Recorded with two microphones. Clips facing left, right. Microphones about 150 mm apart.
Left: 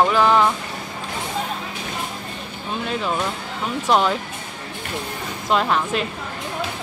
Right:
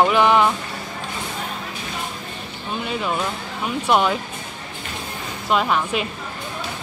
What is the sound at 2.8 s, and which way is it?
Speech, 5° right (ahead or behind).